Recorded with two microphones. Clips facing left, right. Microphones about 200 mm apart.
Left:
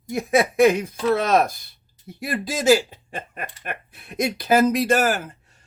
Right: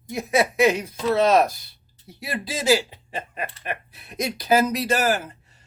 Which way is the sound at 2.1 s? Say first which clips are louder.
Left 3 dB; 50° left (ahead or behind).